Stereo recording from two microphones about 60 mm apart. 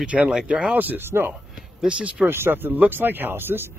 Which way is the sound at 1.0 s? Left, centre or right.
Right.